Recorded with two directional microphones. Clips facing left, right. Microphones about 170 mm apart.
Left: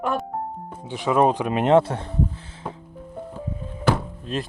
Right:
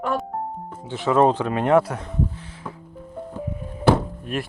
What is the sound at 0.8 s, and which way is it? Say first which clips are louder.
Speech: right 1 dB; 15° left (ahead or behind).